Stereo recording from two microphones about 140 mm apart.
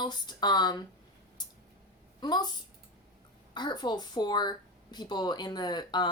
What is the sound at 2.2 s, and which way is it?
Speech, 30° left (ahead or behind).